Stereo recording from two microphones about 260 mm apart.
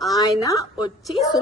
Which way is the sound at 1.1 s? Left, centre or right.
Centre.